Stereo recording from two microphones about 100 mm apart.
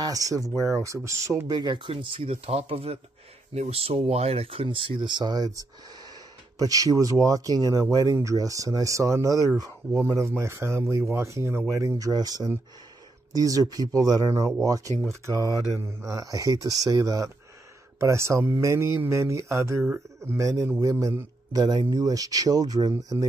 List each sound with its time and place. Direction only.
0.0 s speech: 35° right (ahead or behind)
1.5 s speech: 50° right (ahead or behind)
6.7 s speech: 35° right (ahead or behind)
21.5 s speech: 40° right (ahead or behind)